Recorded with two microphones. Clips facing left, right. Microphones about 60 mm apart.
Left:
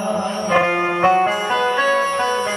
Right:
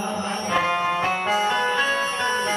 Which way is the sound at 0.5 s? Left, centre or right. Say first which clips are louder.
Left 5 dB; left.